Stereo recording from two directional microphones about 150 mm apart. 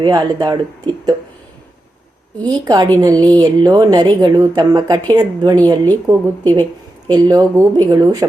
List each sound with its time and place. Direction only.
0.0 s a woman's voice: 30° right (ahead or behind)
2.4 s a woman's voice: 30° right (ahead or behind)